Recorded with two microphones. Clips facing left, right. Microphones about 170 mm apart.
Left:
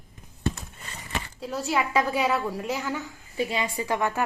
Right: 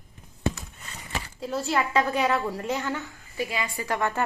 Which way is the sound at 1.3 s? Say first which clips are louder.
Right 1 dB; centre (ahead or behind).